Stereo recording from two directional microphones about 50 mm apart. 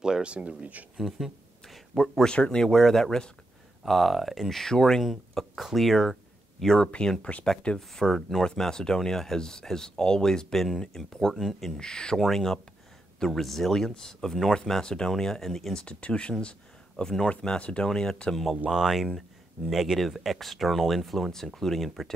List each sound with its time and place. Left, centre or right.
0.0 s speech: centre
0.9 s speech: centre
2.0 s speech: centre
7.2 s speech: left
7.9 s speech: centre
11.8 s speech: centre
15.7 s speech: left
17.0 s speech: centre
17.6 s speech: left
18.7 s speech: centre